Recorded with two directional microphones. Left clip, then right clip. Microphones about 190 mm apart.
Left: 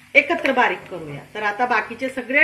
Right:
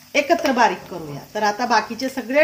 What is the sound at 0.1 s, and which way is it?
A woman's voice, 65° right (ahead or behind).